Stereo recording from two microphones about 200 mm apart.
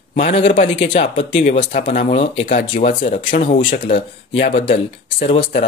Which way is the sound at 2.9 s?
40° left (ahead or behind).